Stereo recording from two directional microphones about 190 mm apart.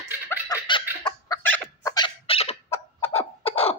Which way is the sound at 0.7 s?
25° left (ahead or behind).